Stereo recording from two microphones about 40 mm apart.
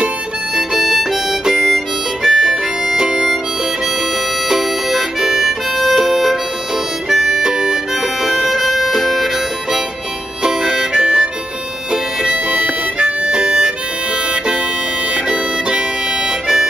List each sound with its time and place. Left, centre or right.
0.6 s harmonica: centre
2.2 s harmonica: centre
4.5 s harmonica: centre
7.4 s harmonica: centre
12.4 s harmonica: right
16.3 s music: centre